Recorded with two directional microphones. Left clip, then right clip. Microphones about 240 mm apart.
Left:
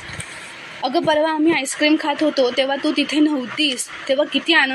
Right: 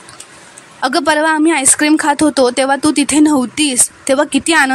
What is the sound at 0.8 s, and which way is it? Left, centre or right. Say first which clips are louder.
Speech: right 5 dB; right.